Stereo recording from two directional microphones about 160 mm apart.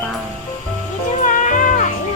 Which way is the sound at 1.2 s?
55° left (ahead or behind).